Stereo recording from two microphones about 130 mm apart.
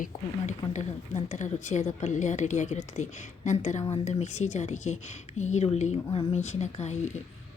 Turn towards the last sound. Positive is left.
turn(degrees=60)  # may be behind; listen again after turning